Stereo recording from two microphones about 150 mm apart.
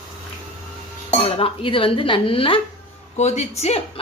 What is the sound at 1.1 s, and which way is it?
Speech, 40° left (ahead or behind).